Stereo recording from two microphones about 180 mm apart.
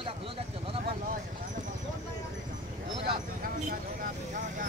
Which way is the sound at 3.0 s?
50° right (ahead or behind).